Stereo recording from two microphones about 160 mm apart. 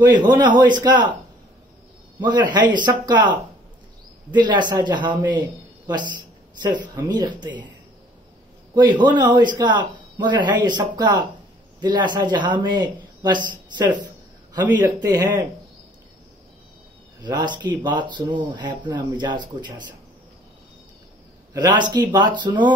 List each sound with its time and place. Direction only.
0.4 s speech: 30° right (ahead or behind)
2.1 s speech: 25° right (ahead or behind)
4.4 s speech: 30° right (ahead or behind)
8.7 s a man's voice: 30° right (ahead or behind)
17.2 s speech: 25° right (ahead or behind)
21.5 s speech: 30° right (ahead or behind)